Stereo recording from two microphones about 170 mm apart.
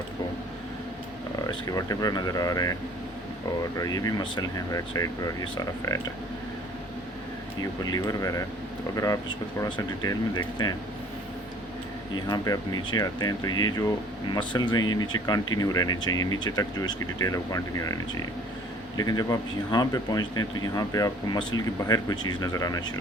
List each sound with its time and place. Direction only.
1.5 s speech: 20° left (ahead or behind)
3.8 s speech: 20° left (ahead or behind)
7.6 s speech: 20° left (ahead or behind)
9.6 s speech: 25° left (ahead or behind)
12.3 s speech: 25° left (ahead or behind)